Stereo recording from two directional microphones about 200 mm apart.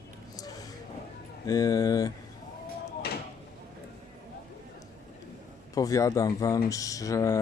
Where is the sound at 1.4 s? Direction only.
15° left (ahead or behind).